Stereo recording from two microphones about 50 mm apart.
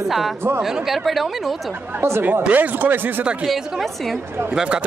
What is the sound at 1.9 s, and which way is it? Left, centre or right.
Speech, right.